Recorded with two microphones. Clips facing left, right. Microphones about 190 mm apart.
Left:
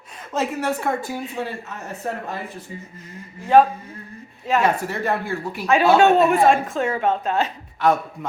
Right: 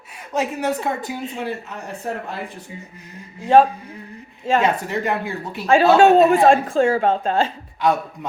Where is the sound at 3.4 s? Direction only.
25° right (ahead or behind).